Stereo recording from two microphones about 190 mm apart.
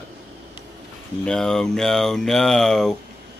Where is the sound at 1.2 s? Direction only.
5° left (ahead or behind).